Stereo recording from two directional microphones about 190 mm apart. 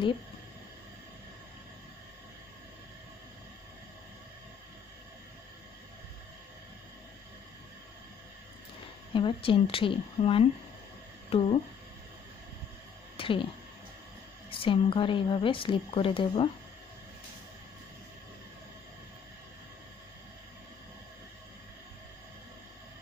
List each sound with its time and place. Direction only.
9.1 s a woman's voice: 25° left (ahead or behind)
13.2 s speech: 30° left (ahead or behind)
14.5 s a woman's voice: 25° left (ahead or behind)